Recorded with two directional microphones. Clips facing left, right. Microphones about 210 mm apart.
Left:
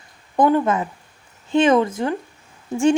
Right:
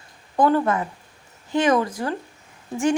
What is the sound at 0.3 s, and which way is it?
Speech, 20° left (ahead or behind).